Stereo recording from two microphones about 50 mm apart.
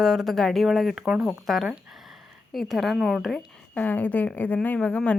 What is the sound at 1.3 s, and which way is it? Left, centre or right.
Speech, centre.